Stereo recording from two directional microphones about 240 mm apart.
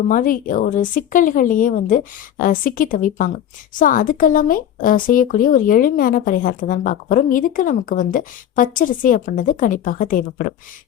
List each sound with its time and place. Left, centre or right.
0.1 s speech: left